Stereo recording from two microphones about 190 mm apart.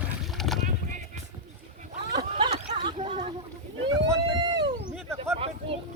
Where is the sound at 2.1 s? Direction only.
25° right (ahead or behind).